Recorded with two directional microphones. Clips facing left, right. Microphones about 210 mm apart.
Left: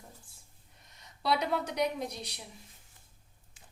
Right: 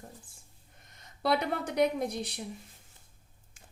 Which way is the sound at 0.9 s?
55° right (ahead or behind).